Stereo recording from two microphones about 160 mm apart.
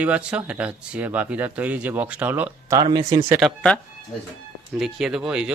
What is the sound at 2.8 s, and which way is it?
Speech, 30° right (ahead or behind).